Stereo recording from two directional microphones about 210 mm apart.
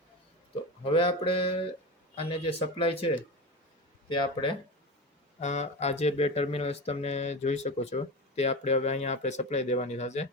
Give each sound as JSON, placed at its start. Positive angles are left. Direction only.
{"t": 0.9, "sound": "speech", "side_deg": 25}
{"t": 4.1, "sound": "speech", "side_deg": 20}
{"t": 5.4, "sound": "speech", "side_deg": 35}